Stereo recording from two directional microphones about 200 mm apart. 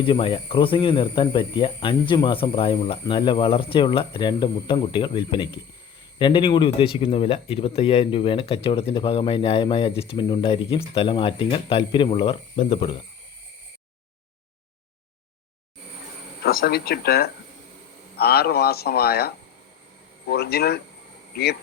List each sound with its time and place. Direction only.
0.0 s speech: 25° left (ahead or behind)
16.4 s speech: 50° left (ahead or behind)